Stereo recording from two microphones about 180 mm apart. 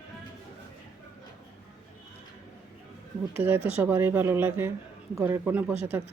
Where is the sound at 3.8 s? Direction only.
10° right (ahead or behind).